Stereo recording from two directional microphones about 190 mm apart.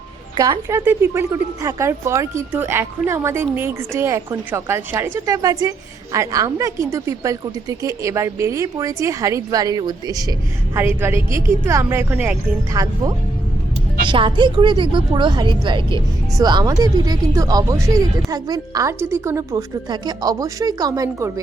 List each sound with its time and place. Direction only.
0.3 s speech: 20° right (ahead or behind)
12.7 s speech: 20° right (ahead or behind)